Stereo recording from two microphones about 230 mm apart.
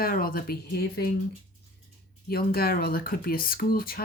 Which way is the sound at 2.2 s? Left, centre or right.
Left.